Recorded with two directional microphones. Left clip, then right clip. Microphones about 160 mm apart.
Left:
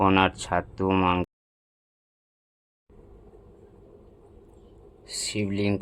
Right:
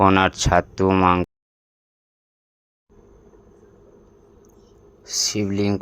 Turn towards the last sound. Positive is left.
turn(degrees=-25)  # may be behind; listen again after turning